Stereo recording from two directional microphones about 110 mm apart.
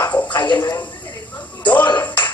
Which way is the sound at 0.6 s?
30° left (ahead or behind).